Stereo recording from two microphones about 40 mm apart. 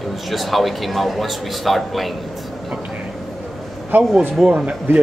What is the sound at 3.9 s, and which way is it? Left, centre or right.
Speech, right.